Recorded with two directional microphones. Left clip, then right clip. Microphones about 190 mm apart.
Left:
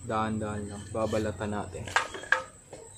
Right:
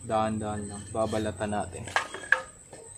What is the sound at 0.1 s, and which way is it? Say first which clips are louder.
A man's voice: right 3 dB; 25° right (ahead or behind).